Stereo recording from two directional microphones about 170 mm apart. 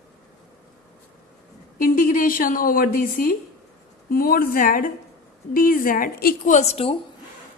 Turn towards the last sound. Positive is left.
turn(degrees=35)  # may be behind; listen again after turning